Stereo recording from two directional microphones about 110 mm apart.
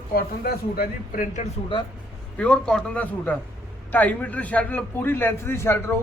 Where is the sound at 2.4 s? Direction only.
10° left (ahead or behind).